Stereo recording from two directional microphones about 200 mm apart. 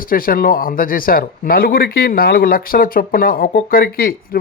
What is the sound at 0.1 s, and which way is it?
Speech, 45° left (ahead or behind).